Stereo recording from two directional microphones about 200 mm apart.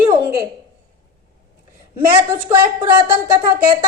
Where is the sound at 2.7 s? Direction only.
15° right (ahead or behind).